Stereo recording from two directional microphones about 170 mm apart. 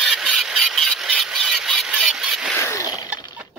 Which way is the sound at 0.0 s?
Centre (ahead or behind).